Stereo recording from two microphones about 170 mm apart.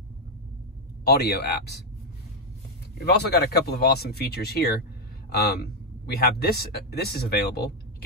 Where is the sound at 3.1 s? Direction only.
70° left (ahead or behind).